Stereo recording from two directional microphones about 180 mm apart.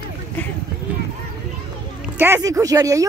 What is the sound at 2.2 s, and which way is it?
Speech, 15° right (ahead or behind).